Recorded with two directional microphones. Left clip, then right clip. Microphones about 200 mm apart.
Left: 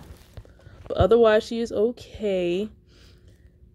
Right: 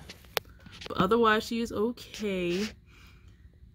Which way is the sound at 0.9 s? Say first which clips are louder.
Left 7 dB; 35° right (ahead or behind).